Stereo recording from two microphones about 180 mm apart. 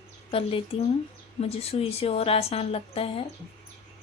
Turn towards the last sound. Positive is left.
turn(degrees=30)  # may be behind; listen again after turning